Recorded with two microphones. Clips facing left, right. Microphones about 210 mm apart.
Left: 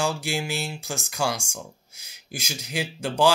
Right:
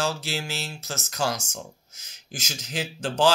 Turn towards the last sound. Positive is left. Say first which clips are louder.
# left 1 dB
turn(degrees=10)  # may be behind; listen again after turning